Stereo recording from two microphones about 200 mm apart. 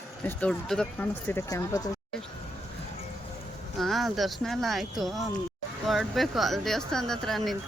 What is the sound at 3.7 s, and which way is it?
Speech, centre (ahead or behind).